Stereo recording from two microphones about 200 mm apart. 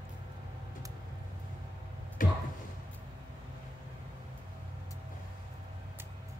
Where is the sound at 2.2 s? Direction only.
45° left (ahead or behind).